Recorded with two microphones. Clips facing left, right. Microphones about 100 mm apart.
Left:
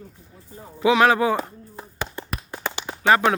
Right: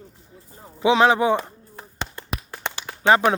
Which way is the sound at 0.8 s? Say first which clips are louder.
Even; 25° right (ahead or behind).